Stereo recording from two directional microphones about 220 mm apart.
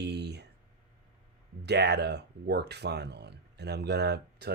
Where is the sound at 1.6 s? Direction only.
50° right (ahead or behind).